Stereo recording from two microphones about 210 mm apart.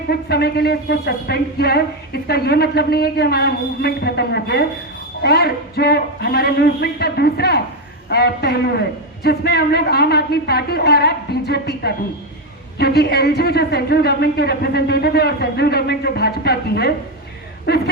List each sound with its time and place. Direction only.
0.1 s a woman's voice: 50° left (ahead or behind)